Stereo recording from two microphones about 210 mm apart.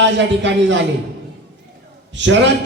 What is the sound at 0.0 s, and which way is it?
Speech, 60° right (ahead or behind).